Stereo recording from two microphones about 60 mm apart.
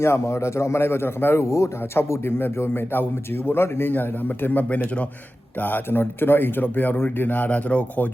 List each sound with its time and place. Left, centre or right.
0.0 s a man's voice: left
1.5 s speech: left
2.0 s speech: left